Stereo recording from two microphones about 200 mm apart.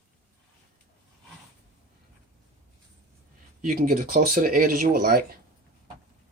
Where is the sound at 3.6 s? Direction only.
40° right (ahead or behind).